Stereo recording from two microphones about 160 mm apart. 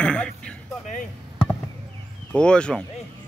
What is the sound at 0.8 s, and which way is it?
Speech, 50° left (ahead or behind).